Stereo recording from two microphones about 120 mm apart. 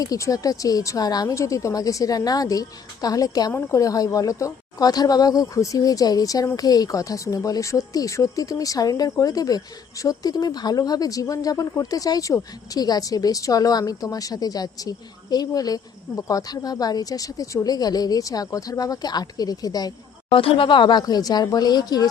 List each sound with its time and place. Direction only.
0.0 s speech: 30° left (ahead or behind)
20.3 s speech: 50° left (ahead or behind)